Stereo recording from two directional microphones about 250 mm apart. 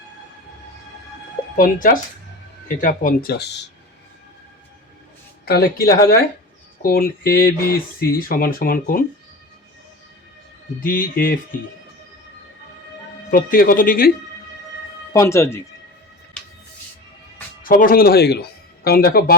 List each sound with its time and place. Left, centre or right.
1.5 s speech: left
5.5 s speech: left
10.8 s speech: left
13.3 s speech: left
15.1 s speech: centre
17.6 s speech: left